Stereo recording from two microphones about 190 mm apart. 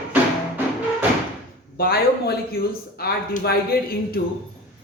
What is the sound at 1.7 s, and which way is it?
A man's voice, 55° left (ahead or behind).